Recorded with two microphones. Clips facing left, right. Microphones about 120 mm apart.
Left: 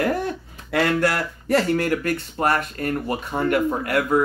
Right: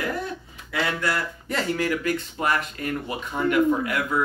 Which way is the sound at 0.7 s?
55° left (ahead or behind).